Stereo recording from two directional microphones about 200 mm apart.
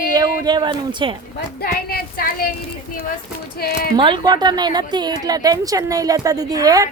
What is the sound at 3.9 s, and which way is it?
A woman's voice, 25° right (ahead or behind).